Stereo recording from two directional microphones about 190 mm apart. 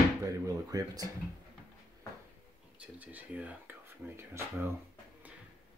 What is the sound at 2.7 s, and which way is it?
Speech, 5° right (ahead or behind).